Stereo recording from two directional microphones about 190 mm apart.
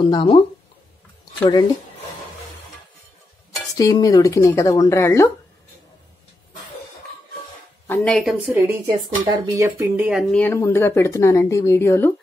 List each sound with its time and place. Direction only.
0.0 s speech: 25° left (ahead or behind)
1.4 s speech: 25° left (ahead or behind)
3.7 s speech: 20° left (ahead or behind)
7.8 s a woman's voice: 5° left (ahead or behind)
10.3 s speech: 10° left (ahead or behind)